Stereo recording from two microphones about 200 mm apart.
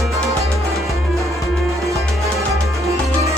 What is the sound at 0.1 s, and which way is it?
Music, 15° right (ahead or behind).